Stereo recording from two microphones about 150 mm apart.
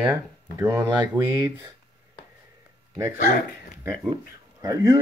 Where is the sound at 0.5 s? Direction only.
20° right (ahead or behind).